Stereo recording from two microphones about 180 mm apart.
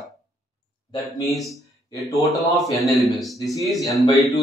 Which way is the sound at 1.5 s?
20° left (ahead or behind).